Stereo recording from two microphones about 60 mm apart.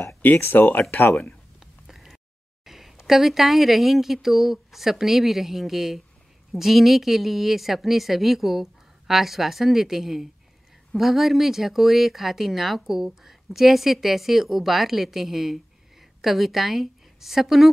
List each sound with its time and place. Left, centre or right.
0.2 s speech: left
1.6 s a sound: centre
2.6 s speech: centre